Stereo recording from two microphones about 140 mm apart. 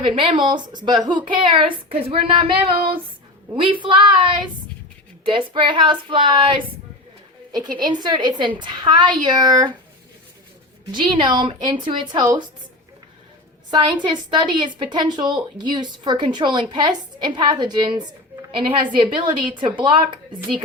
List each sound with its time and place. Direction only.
0.0 s a woman's voice: 40° right (ahead or behind)
3.5 s a woman's voice: 35° right (ahead or behind)
11.1 s a woman's voice: 35° right (ahead or behind)
13.7 s a woman's voice: 35° right (ahead or behind)